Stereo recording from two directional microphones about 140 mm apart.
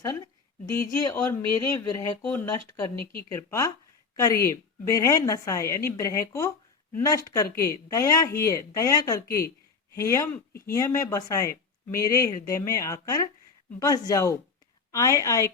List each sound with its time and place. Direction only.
0.6 s speech: 25° left (ahead or behind)
7.5 s speech: 20° left (ahead or behind)